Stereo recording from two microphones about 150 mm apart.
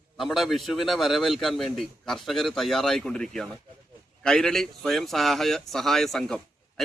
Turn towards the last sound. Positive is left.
turn(degrees=0)  # may be behind; listen again after turning